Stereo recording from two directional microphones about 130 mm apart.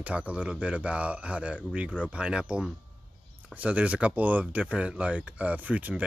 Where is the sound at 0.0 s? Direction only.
10° right (ahead or behind).